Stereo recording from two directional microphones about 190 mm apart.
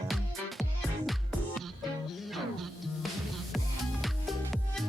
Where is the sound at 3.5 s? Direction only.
Centre (ahead or behind).